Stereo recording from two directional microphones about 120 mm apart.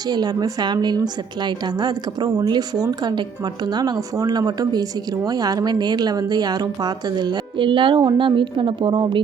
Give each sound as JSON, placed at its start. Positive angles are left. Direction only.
{"t": 0.1, "sound": "a woman's voice", "side_deg": -35}